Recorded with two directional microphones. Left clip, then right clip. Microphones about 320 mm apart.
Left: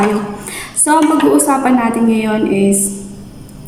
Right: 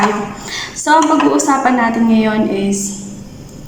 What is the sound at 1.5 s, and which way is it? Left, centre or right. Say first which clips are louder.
A woman's voice: even; centre.